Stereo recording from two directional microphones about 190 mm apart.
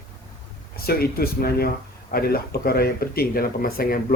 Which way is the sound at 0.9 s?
55° left (ahead or behind).